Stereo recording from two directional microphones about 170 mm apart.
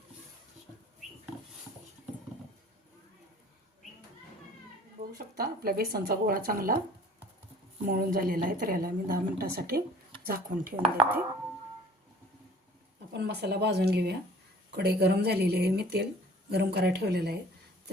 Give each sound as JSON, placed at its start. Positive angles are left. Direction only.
{"t": 5.1, "sound": "a woman's voice", "side_deg": -60}
{"t": 7.9, "sound": "a woman's voice", "side_deg": -55}
{"t": 10.8, "sound": "speech", "side_deg": -30}
{"t": 13.1, "sound": "speech", "side_deg": -75}